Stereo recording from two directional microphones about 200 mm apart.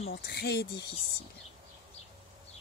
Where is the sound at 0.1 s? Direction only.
55° left (ahead or behind).